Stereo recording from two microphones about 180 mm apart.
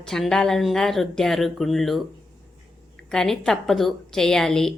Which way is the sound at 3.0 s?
5° left (ahead or behind).